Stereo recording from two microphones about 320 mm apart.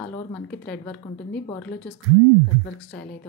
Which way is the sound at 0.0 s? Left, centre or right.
Centre.